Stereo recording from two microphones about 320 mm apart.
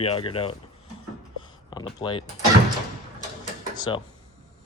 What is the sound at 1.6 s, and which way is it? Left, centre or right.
Speech, centre.